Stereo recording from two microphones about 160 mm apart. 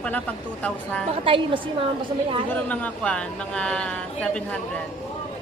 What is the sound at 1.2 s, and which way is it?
Speech, 35° right (ahead or behind).